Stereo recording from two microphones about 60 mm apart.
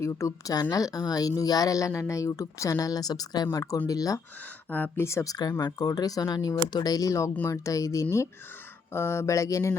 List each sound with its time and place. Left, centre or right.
0.0 s speech: left
4.9 s speech: left
5.2 s speech: left
8.9 s speech: left